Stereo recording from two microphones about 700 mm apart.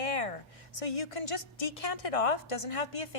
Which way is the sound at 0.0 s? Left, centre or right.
Left.